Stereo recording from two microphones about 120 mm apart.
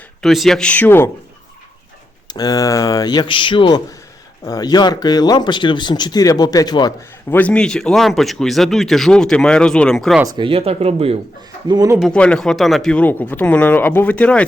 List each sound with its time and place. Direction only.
0.2 s speech: centre (ahead or behind); by 1.1 s 20° left (ahead or behind)
2.2 s speech: 35° left (ahead or behind)
4.4 s speech: 35° left (ahead or behind)
7.3 s speech: 15° left (ahead or behind)
10.2 s speech: 40° right (ahead or behind)
11.7 s speech: 30° right (ahead or behind)
12.1 s speech: 10° left (ahead or behind)